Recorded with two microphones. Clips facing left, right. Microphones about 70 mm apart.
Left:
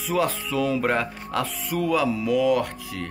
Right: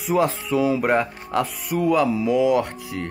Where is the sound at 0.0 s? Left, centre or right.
Right.